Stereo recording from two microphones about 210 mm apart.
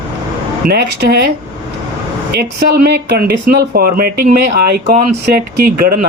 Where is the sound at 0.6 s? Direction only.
45° right (ahead or behind).